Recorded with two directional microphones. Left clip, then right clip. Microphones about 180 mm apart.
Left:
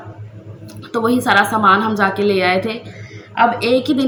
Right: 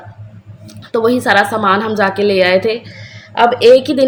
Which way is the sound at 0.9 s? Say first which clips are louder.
Right 3 dB; 40° right (ahead or behind).